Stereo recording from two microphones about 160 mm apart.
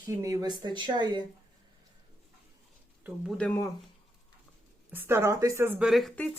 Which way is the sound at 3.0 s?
5° right (ahead or behind).